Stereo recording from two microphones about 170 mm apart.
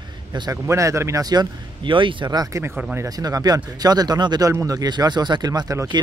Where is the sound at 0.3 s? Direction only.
20° right (ahead or behind).